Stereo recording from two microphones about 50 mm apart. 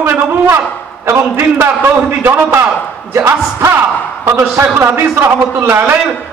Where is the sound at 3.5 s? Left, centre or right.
Right.